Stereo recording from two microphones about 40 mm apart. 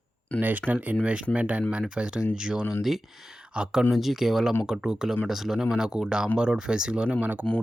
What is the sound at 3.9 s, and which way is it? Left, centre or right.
Speech, centre.